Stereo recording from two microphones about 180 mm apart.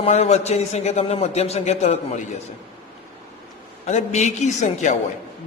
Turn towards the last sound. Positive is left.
turn(degrees=40)  # may be behind; listen again after turning